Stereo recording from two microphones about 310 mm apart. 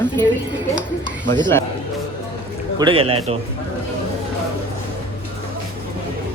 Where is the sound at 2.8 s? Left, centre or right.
Centre.